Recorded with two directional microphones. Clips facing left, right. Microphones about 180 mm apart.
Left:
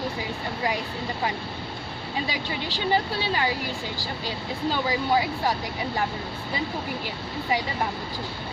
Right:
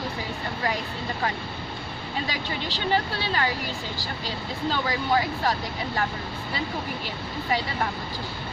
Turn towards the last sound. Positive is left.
turn(degrees=15)  # may be behind; listen again after turning